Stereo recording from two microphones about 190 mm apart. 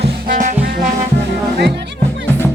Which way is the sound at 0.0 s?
40° right (ahead or behind).